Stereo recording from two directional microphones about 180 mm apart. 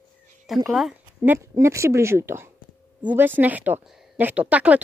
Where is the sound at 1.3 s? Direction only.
15° right (ahead or behind).